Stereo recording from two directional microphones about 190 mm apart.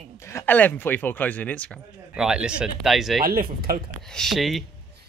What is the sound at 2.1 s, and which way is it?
Speech, 5° right (ahead or behind).